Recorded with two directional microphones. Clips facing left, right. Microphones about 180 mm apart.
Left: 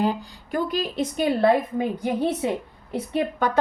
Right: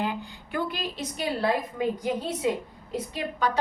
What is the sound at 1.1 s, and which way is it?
Speech, 55° left (ahead or behind).